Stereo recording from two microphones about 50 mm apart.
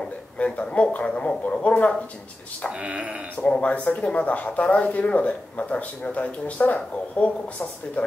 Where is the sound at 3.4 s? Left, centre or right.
Left.